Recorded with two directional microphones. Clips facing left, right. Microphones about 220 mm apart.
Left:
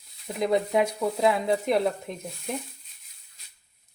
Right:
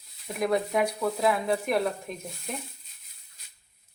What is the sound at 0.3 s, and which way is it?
Speech, 25° left (ahead or behind).